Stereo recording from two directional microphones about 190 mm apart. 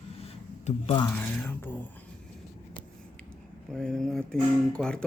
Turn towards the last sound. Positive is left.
turn(degrees=5)  # may be behind; listen again after turning